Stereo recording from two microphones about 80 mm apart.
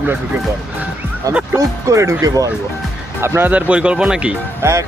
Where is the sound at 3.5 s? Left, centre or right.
Centre.